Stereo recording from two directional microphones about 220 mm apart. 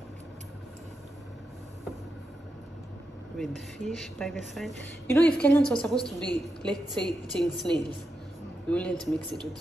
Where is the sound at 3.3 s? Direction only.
Centre (ahead or behind).